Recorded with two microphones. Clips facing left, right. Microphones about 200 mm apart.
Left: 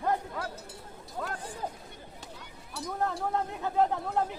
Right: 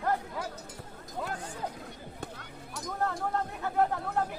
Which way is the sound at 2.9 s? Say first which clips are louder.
Left 1 dB; 15° left (ahead or behind).